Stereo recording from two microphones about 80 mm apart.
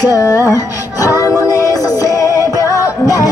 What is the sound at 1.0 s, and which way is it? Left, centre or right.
Music, left.